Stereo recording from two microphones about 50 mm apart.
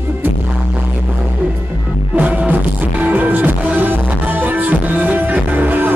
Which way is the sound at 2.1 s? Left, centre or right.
Right.